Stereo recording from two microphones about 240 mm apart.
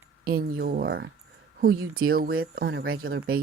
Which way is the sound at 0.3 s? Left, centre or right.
Right.